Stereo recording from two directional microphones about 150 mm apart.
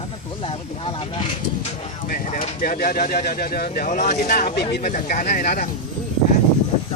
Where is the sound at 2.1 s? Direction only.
70° left (ahead or behind).